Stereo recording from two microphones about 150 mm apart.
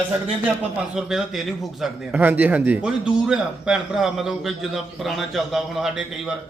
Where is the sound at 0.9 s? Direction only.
5° right (ahead or behind).